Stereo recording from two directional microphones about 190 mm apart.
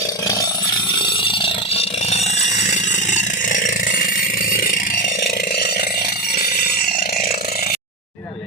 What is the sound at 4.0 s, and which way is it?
Vehicle, 45° left (ahead or behind).